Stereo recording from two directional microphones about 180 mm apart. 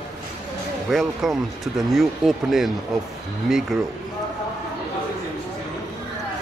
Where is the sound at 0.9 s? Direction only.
Centre (ahead or behind).